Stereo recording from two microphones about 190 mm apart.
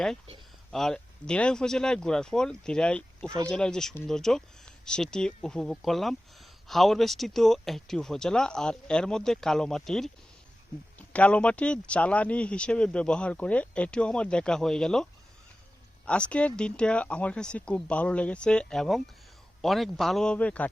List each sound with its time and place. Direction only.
0.7 s speech: centre (ahead or behind)
3.2 s speech: 15° right (ahead or behind)
3.5 s speech: 5° left (ahead or behind)
16.0 s speech: 5° left (ahead or behind)